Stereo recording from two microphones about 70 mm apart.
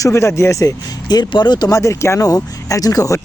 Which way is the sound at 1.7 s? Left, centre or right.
Left.